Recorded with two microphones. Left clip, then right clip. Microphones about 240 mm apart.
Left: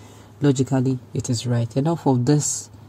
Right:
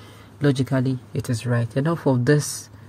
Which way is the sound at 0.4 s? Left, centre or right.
Right.